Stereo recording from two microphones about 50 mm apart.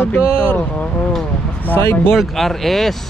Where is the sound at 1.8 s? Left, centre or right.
Left.